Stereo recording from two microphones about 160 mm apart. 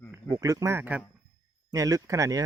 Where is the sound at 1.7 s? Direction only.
20° right (ahead or behind).